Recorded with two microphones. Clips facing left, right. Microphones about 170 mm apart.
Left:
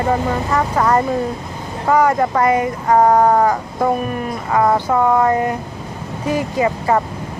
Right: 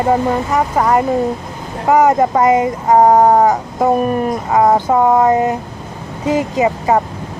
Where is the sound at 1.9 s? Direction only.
20° right (ahead or behind).